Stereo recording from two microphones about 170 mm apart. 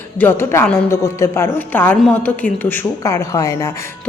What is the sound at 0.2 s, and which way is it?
A woman's voice, 15° left (ahead or behind).